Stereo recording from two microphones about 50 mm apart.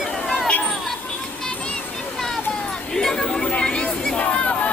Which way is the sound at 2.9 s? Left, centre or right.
Centre.